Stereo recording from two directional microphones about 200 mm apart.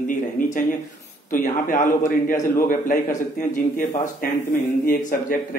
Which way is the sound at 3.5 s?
40° left (ahead or behind).